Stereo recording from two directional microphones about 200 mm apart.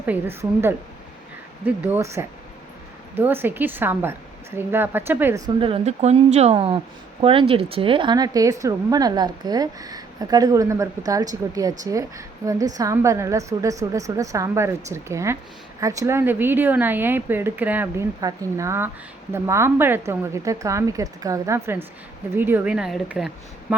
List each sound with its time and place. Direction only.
0.0 s a woman's voice: 10° right (ahead or behind)
5.5 s a woman's voice: 25° right (ahead or behind); by 23.7 s 5° right (ahead or behind)